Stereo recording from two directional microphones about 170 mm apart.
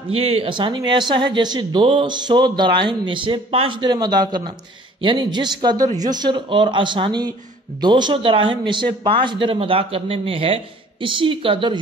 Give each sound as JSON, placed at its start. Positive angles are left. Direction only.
{"t": 0.1, "sound": "a man's voice", "side_deg": -35}